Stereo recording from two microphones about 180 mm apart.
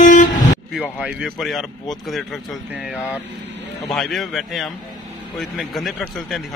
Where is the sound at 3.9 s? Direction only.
Centre (ahead or behind).